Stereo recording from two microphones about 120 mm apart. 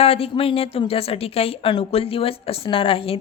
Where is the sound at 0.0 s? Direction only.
55° left (ahead or behind).